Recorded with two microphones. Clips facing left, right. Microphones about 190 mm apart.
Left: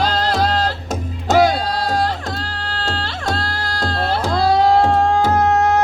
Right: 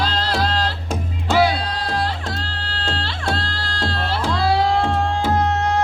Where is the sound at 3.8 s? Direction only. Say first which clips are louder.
Left 3 dB; 40° left (ahead or behind).